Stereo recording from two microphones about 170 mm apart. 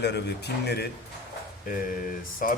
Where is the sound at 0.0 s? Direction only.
80° left.